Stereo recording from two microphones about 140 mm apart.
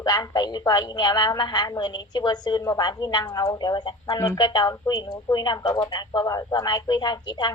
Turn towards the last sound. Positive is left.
turn(degrees=30)  # may be behind; listen again after turning